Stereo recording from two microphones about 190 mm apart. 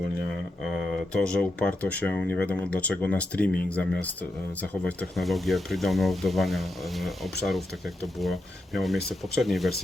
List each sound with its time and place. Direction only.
1.1 s speech: 5° left (ahead or behind)